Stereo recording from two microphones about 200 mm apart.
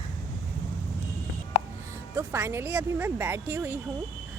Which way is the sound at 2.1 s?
15° right (ahead or behind).